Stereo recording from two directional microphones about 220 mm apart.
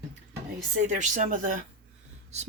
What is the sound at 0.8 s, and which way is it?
Speech, 35° right (ahead or behind).